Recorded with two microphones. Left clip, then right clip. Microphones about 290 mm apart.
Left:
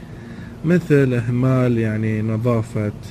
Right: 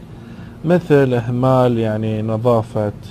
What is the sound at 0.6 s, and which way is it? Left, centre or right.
A man's voice, right.